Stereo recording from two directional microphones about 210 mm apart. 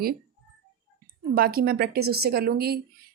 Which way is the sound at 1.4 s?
45° right (ahead or behind).